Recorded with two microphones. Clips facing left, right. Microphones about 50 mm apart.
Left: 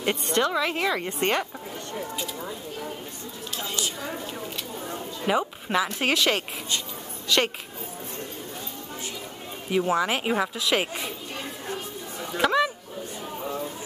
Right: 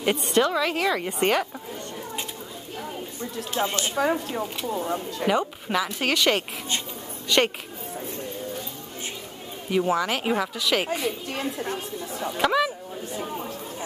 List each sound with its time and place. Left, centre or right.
0.3 s a woman's voice: centre
3.5 s speech: right
3.9 s speech: right
5.2 s a woman's voice: centre
9.7 s a woman's voice: centre
12.4 s a woman's voice: centre